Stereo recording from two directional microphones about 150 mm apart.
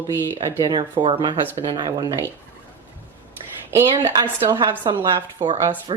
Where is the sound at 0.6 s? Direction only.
30° right (ahead or behind).